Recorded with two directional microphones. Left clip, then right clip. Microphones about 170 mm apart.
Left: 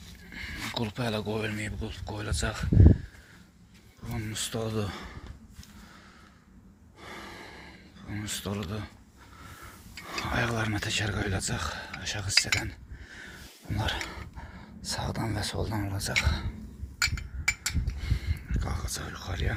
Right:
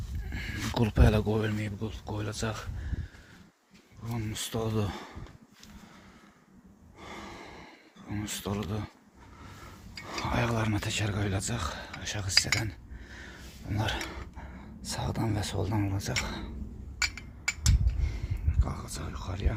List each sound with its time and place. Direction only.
0.3 s speech: 45° right (ahead or behind); by 2.6 s 25° right (ahead or behind)
4.1 s speech: 15° right (ahead or behind)
7.0 s gasp: 15° right (ahead or behind)
10.1 s speech: 20° right (ahead or behind)
12.6 s dishes: 25° right (ahead or behind)
14.3 s speech: 20° right (ahead or behind)
17.0 s a sound: 30° left (ahead or behind)
18.0 s whispering: 10° right (ahead or behind)